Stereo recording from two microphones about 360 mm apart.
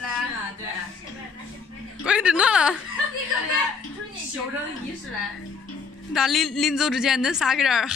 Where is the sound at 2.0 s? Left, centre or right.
Centre.